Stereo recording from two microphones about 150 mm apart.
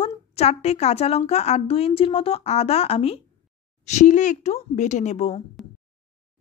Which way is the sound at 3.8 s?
55° left (ahead or behind).